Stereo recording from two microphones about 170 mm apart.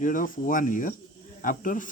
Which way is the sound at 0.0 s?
50° left (ahead or behind).